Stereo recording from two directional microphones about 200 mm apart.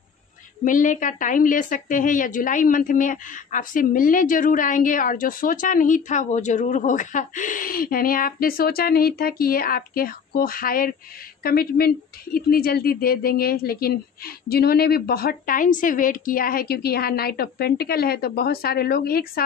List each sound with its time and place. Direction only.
0.7 s a woman's voice: 40° left (ahead or behind)